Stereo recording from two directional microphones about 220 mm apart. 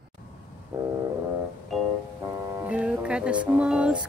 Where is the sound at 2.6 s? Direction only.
5° right (ahead or behind).